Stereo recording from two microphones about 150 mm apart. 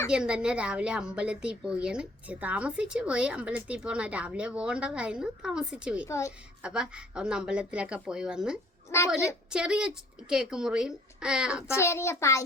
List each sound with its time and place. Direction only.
0.1 s a woman's voice: 5° right (ahead or behind)
6.1 s a child's voice: 20° left (ahead or behind)
6.6 s a woman's voice: 5° right (ahead or behind)
11.8 s a child's voice: 20° left (ahead or behind)